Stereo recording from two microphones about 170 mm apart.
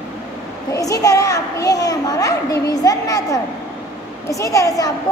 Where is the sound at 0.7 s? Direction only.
20° left (ahead or behind).